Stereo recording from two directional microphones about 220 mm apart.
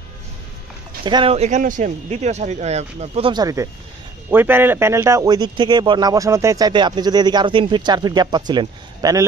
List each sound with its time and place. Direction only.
1.0 s speech: 25° right (ahead or behind)